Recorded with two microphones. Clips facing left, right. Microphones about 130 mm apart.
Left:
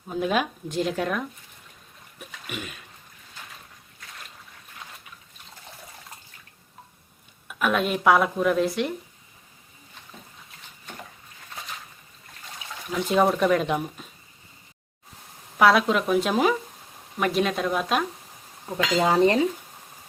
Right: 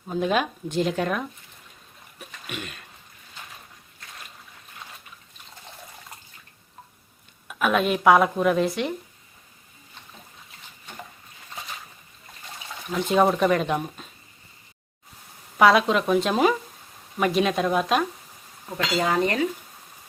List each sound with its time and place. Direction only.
0.1 s speech: centre (ahead or behind)
2.1 s a sound: 5° left (ahead or behind)
7.4 s speech: centre (ahead or behind)
12.9 s speech: centre (ahead or behind)
15.5 s speech: centre (ahead or behind)
18.9 s speech: 30° left (ahead or behind)